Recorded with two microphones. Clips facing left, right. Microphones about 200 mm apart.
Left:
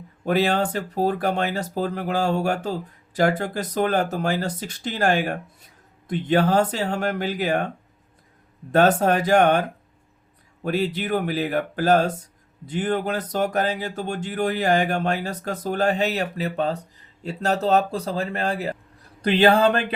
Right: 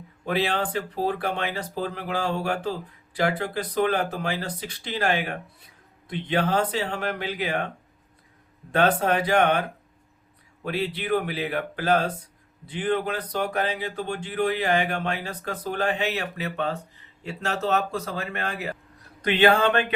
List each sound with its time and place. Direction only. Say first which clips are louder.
0.3 s speech: left 5 dB; 45° left (ahead or behind)
8.7 s a man's voice: left 4 dB; 45° left (ahead or behind)